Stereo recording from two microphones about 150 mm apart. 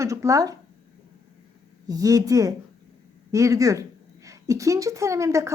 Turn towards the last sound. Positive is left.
turn(degrees=-20)  # may be behind; listen again after turning